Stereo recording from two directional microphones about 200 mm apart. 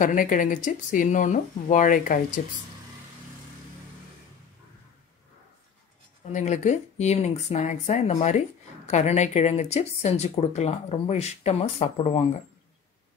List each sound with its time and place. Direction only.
0.0 s speech: 40° left (ahead or behind)
6.3 s speech: 35° left (ahead or behind)